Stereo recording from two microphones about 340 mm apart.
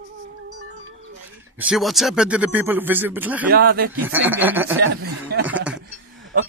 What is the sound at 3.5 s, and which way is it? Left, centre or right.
Speech, right.